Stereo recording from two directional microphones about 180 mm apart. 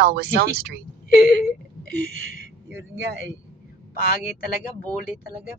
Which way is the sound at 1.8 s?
85° right.